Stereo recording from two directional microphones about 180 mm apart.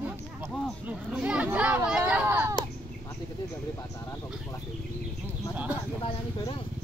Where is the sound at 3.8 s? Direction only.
15° left (ahead or behind).